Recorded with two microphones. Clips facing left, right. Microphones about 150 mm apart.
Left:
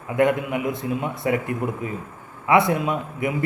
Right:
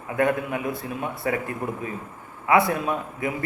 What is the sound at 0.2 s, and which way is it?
A man's voice, 20° left (ahead or behind).